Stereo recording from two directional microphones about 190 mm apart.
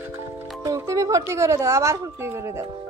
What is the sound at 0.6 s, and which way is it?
A woman's voice, 15° right (ahead or behind).